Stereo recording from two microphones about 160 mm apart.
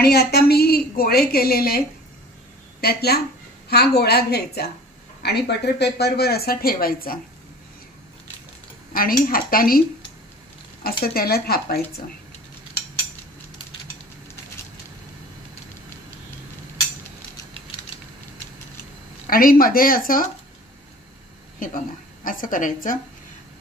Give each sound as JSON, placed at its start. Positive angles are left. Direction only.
{"t": 0.0, "sound": "speech", "side_deg": 80}
{"t": 2.8, "sound": "a woman's voice", "side_deg": 85}
{"t": 8.9, "sound": "speech", "side_deg": 65}
{"t": 19.2, "sound": "speech", "side_deg": 60}
{"t": 21.5, "sound": "a woman's voice", "side_deg": 60}